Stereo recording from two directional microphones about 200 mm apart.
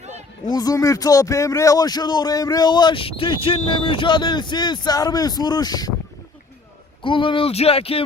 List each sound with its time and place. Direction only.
0.4 s speech: 20° left (ahead or behind)
7.0 s speech: 25° left (ahead or behind)